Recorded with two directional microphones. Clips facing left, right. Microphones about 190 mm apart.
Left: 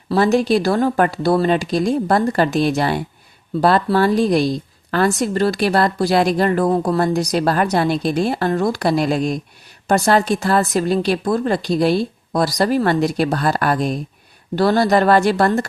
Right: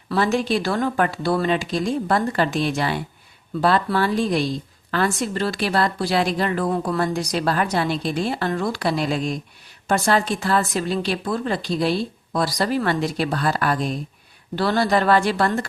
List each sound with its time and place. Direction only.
0.1 s speech: 40° left (ahead or behind)